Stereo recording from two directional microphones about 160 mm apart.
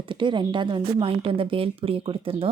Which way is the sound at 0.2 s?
30° right (ahead or behind).